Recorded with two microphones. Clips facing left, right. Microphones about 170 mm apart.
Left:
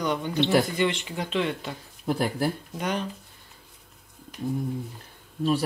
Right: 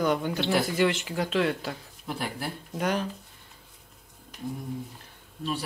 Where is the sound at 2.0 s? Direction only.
40° left (ahead or behind).